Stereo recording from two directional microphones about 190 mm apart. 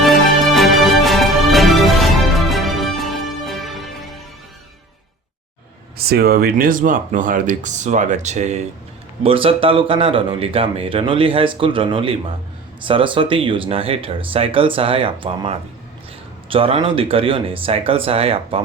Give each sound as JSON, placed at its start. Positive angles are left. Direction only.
{"t": 0.0, "sound": "music", "side_deg": 0}
{"t": 6.0, "sound": "speech", "side_deg": -55}